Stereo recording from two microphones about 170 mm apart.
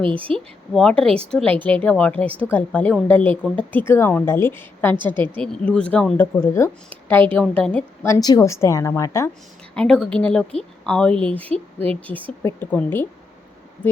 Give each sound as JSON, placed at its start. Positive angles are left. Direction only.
{"t": 0.0, "sound": "speech", "side_deg": -30}
{"t": 0.3, "sound": "a woman's voice", "side_deg": 5}
{"t": 9.7, "sound": "a woman's voice", "side_deg": 5}